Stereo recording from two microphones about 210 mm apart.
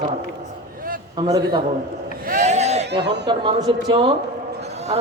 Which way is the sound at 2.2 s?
35° right (ahead or behind).